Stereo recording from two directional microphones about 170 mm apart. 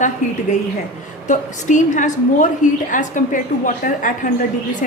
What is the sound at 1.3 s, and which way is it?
A woman's voice, 45° left (ahead or behind).